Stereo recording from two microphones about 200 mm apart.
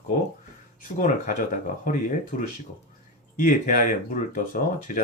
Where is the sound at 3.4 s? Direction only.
40° left (ahead or behind).